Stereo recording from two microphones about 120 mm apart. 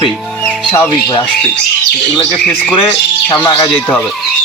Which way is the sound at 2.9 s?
20° left (ahead or behind).